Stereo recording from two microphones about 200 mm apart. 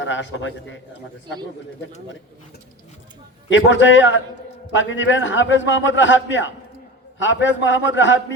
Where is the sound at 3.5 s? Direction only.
70° left (ahead or behind).